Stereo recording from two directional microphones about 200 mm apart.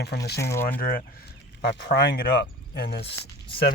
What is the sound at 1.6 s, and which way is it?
Speech, 60° left (ahead or behind).